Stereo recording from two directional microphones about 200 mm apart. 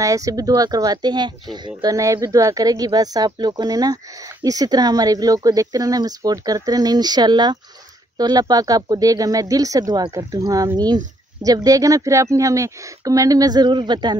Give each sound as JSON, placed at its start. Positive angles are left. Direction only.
{"t": 0.0, "sound": "speech", "side_deg": -15}